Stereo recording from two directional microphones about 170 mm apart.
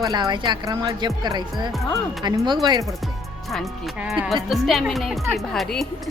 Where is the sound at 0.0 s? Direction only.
25° right (ahead or behind).